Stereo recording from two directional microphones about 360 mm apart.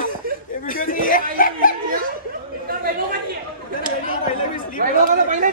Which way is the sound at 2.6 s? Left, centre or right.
Right.